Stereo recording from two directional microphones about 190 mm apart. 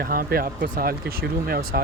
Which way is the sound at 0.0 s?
50° right (ahead or behind).